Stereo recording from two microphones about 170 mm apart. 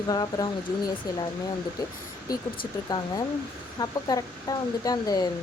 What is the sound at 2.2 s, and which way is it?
Speech, 20° left (ahead or behind).